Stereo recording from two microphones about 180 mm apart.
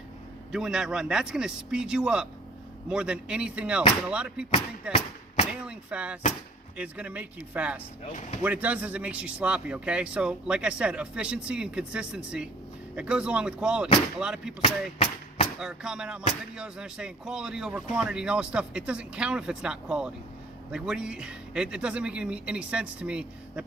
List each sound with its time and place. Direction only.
0.5 s speech: 5° right (ahead or behind)
4.5 s speech: 35° left (ahead or behind)
5.5 s a man's voice: 5° right (ahead or behind)
15.5 s speech: 5° right (ahead or behind)